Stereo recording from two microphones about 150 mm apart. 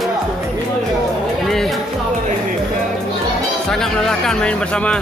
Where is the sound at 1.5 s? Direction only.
Centre (ahead or behind).